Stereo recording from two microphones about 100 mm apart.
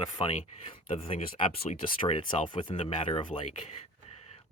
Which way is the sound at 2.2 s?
55° left (ahead or behind).